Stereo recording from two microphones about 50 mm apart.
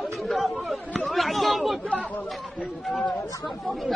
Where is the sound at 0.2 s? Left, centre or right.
Centre.